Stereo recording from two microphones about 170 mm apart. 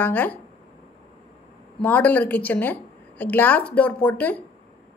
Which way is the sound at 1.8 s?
10° left (ahead or behind).